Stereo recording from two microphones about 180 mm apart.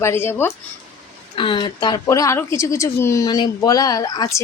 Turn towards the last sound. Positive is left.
turn(degrees=20)  # may be behind; listen again after turning